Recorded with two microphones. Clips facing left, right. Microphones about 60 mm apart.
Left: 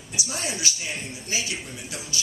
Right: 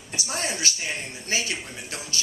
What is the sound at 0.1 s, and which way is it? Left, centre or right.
Speech, right.